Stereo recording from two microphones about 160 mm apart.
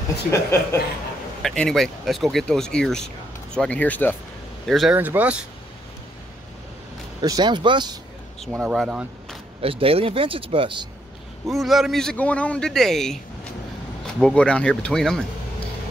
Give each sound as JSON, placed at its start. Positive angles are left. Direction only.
{"t": 0.3, "sound": "speech", "side_deg": 15}
{"t": 1.4, "sound": "a man's voice", "side_deg": 5}
{"t": 4.6, "sound": "a man's voice", "side_deg": 0}
{"t": 4.9, "sound": "speech", "side_deg": -10}
{"t": 7.2, "sound": "speech", "side_deg": -25}
{"t": 8.5, "sound": "speech", "side_deg": -5}
{"t": 9.6, "sound": "speech", "side_deg": -35}
{"t": 11.4, "sound": "a man's voice", "side_deg": 0}
{"t": 14.2, "sound": "a man's voice", "side_deg": 5}